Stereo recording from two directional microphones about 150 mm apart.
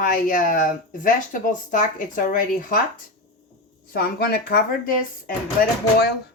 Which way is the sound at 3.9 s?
85° left.